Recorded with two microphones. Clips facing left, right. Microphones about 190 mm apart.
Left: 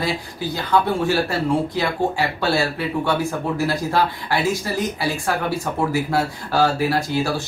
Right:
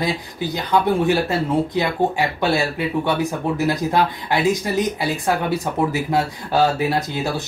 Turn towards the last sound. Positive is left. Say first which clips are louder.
# left 1 dB
turn(degrees=-20)  # may be behind; listen again after turning